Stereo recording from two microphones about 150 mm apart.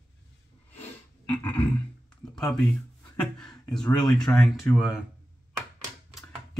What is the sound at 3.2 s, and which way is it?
Speech, 5° left (ahead or behind).